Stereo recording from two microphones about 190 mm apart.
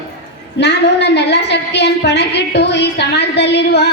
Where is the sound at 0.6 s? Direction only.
65° left (ahead or behind).